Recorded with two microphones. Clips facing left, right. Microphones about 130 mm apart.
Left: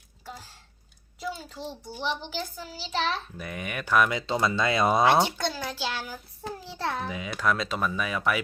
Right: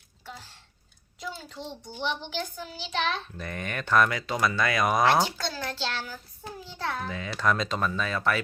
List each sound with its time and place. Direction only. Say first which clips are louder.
0.3 s a sound: left 1 dB; 10° left (ahead or behind)
1.4 s a child's voice: left 1 dB; 5° left (ahead or behind)
4.1 s speech: left 1 dB; 25° left (ahead or behind)
6.8 s speech: left 2 dB; 25° left (ahead or behind)
7.1 s speech: even; 10° left (ahead or behind)